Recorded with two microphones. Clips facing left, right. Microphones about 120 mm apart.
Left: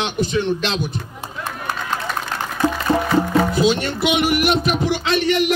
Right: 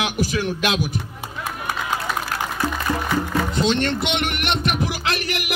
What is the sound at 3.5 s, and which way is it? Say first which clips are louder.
Speech: left 2 dB; 5° left (ahead or behind).